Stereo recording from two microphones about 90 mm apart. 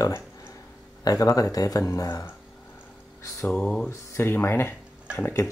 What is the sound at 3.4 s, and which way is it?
Mantra, 15° left (ahead or behind).